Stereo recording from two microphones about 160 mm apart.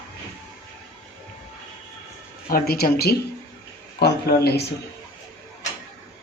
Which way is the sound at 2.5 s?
70° left (ahead or behind).